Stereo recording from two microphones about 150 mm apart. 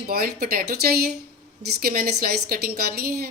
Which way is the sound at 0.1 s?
80° right.